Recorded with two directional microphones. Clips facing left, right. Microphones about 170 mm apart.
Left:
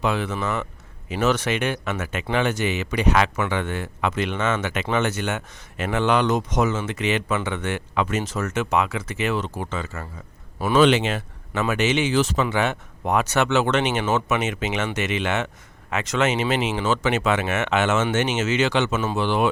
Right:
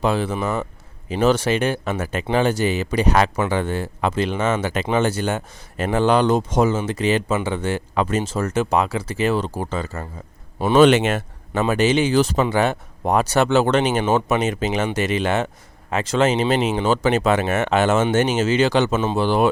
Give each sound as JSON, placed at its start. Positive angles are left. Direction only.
{"t": 0.0, "sound": "speech", "side_deg": -35}
{"t": 10.8, "sound": "speech", "side_deg": -45}
{"t": 11.5, "sound": "speech", "side_deg": -35}